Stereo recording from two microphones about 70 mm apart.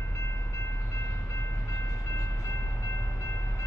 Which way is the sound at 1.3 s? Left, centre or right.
Left.